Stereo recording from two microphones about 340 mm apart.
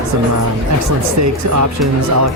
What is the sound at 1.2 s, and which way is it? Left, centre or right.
Speech, right.